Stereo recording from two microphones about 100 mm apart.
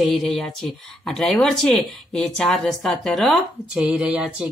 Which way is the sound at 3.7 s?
10° right (ahead or behind).